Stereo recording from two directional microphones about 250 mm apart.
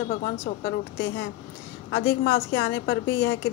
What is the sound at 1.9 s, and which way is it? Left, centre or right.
A woman's voice, left.